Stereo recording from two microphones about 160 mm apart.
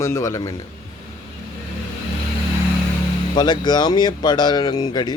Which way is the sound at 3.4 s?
25° left (ahead or behind).